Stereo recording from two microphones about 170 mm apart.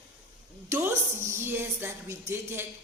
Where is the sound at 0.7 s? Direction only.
15° right (ahead or behind).